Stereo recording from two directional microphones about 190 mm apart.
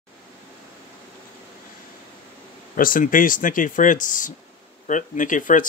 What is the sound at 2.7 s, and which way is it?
Speech, 45° left (ahead or behind).